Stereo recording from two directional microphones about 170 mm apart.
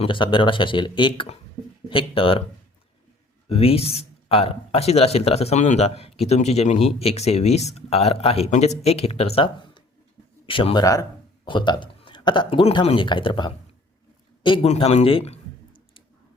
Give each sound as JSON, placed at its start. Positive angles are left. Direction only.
{"t": 0.0, "sound": "speech", "side_deg": 30}
{"t": 3.5, "sound": "a man's voice", "side_deg": 35}
{"t": 14.7, "sound": "speech", "side_deg": 40}